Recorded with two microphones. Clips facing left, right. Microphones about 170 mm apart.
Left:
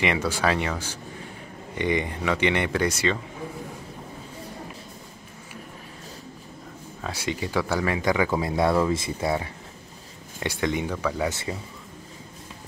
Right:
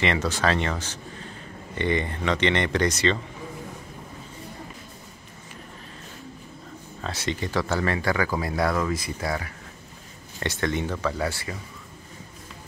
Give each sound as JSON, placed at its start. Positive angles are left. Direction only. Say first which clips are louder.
{"t": 0.0, "sound": "speech", "louder": "even", "side_deg": 10}
{"t": 7.0, "sound": "speech", "louder": "even", "side_deg": 10}
{"t": 10.4, "sound": "speech", "louder": "left 1 dB", "side_deg": 10}